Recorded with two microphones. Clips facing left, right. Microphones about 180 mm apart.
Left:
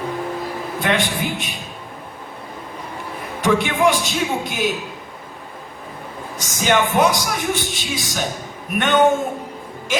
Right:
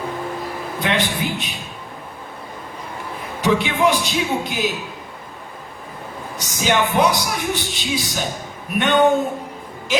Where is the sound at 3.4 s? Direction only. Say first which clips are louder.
Left 1 dB; 50° left (ahead or behind).